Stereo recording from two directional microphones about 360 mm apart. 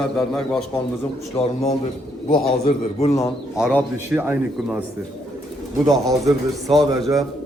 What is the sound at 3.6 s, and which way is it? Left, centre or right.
A man's voice, centre.